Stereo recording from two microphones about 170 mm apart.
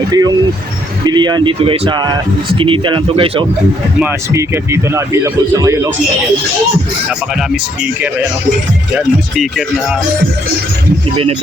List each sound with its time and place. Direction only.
0.1 s speech: 20° right (ahead or behind)
4.0 s speech: 15° right (ahead or behind)
7.1 s speech: 5° right (ahead or behind)
9.3 s speech: centre (ahead or behind)